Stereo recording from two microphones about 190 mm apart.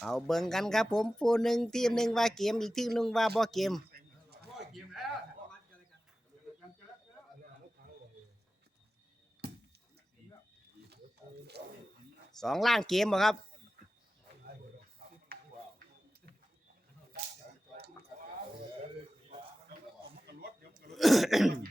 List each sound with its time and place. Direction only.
0.0 s speech: centre (ahead or behind)
4.5 s a sound: centre (ahead or behind)
11.6 s music: 60° right (ahead or behind)
12.4 s speech: centre (ahead or behind)
15.3 s music: 55° right (ahead or behind)
20.2 s a sound: 60° right (ahead or behind)
20.9 s throat clearing: centre (ahead or behind)